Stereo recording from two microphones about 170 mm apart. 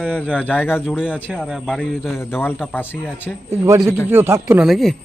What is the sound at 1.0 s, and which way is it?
Speech, 10° left (ahead or behind).